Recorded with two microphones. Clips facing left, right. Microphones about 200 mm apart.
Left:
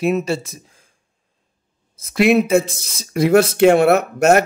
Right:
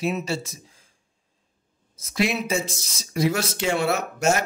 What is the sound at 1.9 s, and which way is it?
Speech, 60° left (ahead or behind).